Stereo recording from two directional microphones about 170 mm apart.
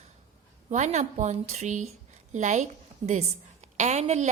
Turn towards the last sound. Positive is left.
turn(degrees=-40)  # may be behind; listen again after turning